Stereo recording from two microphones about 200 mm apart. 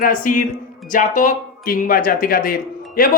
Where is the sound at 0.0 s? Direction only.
45° left (ahead or behind).